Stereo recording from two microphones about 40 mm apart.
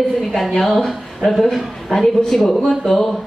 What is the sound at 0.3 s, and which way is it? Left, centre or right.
A woman's voice, centre.